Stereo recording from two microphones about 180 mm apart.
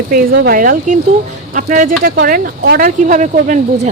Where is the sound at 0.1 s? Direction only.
55° right (ahead or behind).